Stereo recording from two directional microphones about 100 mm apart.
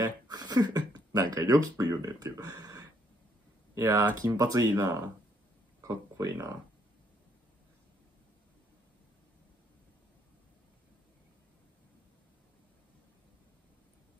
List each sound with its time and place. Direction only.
0.0 s speech: 40° right (ahead or behind)